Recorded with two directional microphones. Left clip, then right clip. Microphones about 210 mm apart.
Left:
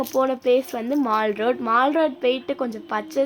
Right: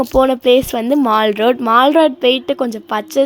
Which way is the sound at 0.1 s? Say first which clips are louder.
Right 8 dB; 35° right (ahead or behind).